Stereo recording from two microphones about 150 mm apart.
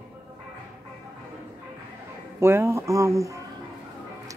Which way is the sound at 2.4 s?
15° right (ahead or behind).